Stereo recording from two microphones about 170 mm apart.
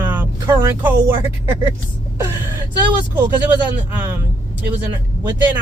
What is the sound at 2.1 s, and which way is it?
Vehicle, 15° right (ahead or behind).